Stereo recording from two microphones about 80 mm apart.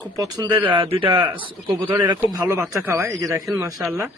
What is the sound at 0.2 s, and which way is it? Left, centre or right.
Speech, right.